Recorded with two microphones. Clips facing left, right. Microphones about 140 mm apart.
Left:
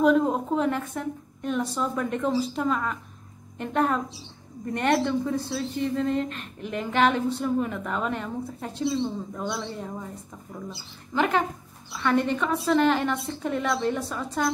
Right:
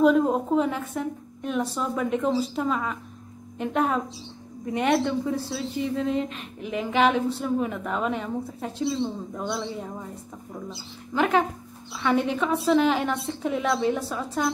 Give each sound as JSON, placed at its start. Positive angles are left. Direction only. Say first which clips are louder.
{"t": 0.0, "sound": "a woman's voice", "louder": "right 1 dB", "side_deg": -5}
{"t": 10.5, "sound": "speech", "louder": "right 1 dB", "side_deg": -20}
{"t": 11.1, "sound": "a woman's voice", "louder": "right 2 dB", "side_deg": 0}